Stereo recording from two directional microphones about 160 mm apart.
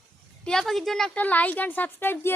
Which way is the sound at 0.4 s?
Centre (ahead or behind).